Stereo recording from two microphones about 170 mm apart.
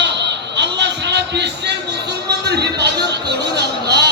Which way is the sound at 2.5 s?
80° right.